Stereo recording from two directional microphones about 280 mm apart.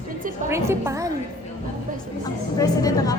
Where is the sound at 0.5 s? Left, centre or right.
Centre.